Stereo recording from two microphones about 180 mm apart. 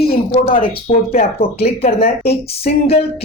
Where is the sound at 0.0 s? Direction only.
60° left (ahead or behind).